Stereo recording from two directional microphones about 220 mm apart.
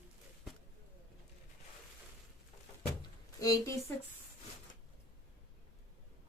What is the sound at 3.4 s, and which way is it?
Speech, 15° left (ahead or behind).